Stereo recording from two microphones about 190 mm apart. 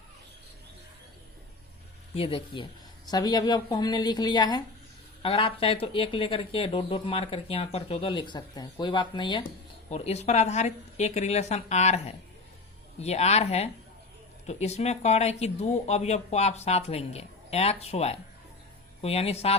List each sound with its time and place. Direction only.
2.1 s speech: 30° left (ahead or behind)
9.9 s speech: 35° left (ahead or behind)